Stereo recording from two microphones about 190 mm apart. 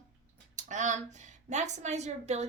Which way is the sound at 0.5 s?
40° right (ahead or behind).